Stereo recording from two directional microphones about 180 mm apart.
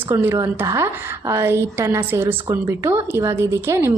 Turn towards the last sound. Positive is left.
turn(degrees=-15)  # may be behind; listen again after turning